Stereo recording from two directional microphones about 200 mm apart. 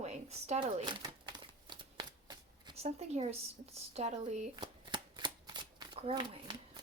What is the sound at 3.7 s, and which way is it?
Speech, 30° right (ahead or behind).